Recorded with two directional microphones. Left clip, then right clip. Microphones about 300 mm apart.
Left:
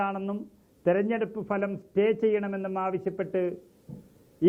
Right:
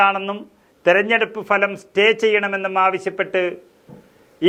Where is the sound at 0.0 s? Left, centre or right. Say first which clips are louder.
Right 14 dB; centre.